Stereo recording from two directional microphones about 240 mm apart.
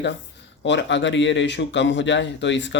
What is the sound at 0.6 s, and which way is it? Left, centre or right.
Speech, left.